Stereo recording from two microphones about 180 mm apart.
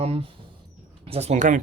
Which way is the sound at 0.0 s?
35° right (ahead or behind).